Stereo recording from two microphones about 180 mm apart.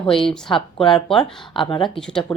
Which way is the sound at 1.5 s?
25° left (ahead or behind).